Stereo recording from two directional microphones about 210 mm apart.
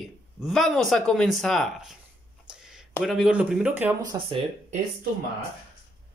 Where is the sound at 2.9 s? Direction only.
Centre (ahead or behind); by 4.3 s 15° right (ahead or behind).